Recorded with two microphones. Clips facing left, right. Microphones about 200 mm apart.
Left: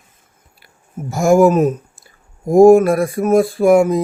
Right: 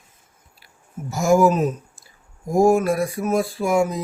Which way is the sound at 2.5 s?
55° left (ahead or behind).